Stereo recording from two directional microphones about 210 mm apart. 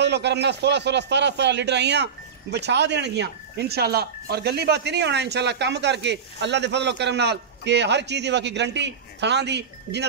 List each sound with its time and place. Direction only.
0.0 s a man's voice: 55° right (ahead or behind)